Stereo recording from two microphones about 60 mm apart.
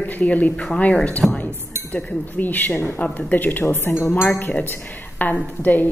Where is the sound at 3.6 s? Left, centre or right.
Left.